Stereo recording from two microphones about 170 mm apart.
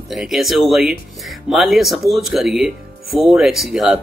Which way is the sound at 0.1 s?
Centre (ahead or behind).